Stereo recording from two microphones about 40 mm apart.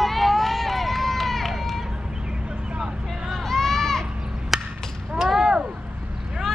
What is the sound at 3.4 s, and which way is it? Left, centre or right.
Run, centre.